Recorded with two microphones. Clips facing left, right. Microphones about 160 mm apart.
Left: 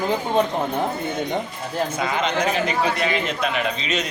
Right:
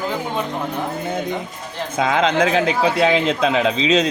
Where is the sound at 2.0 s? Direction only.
90° right.